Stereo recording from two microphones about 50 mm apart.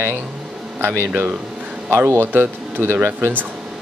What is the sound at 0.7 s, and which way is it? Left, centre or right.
Speech, right.